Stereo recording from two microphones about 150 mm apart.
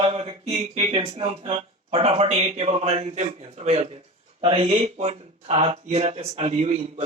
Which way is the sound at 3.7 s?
45° right (ahead or behind).